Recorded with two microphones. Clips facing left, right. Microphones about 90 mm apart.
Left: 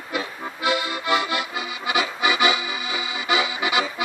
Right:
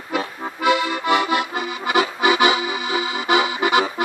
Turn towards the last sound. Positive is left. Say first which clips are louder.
# right 5 dB
turn(degrees=-50)  # may be behind; listen again after turning